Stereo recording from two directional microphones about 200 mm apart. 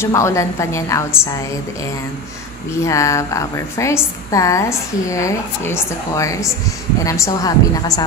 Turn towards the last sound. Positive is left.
turn(degrees=20)  # may be behind; listen again after turning